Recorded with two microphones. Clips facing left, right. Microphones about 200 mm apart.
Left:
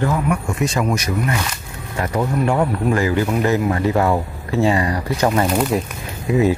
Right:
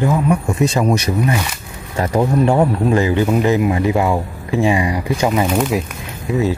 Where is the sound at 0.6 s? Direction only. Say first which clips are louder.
Right 4 dB; 35° right (ahead or behind); by 5.8 s 5° right (ahead or behind).